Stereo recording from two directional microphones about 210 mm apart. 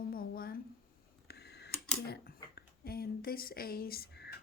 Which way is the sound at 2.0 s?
50° left (ahead or behind).